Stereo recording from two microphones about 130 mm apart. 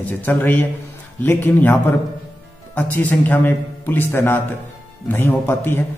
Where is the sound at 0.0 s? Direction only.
15° left (ahead or behind).